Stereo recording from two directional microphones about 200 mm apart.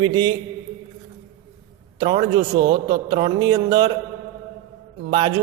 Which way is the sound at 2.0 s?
25° right (ahead or behind).